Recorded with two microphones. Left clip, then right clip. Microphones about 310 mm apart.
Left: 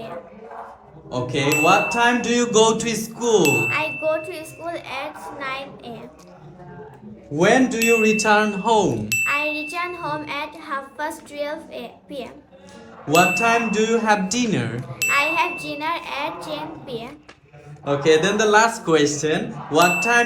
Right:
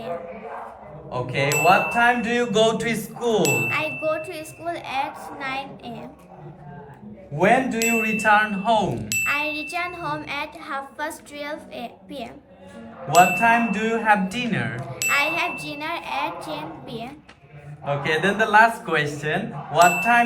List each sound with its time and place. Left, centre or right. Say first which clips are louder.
1.3 s speech: left 1 dB; centre
7.3 s speech: left 2 dB; left; by 12.3 s centre
13.1 s speech: right 1 dB; centre
14.8 s speech: left 2 dB; centre
18.0 s speech: left 5 dB; centre